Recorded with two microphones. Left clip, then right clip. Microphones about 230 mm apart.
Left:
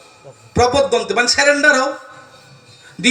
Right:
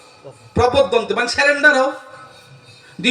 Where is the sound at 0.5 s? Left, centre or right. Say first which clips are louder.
Even; left.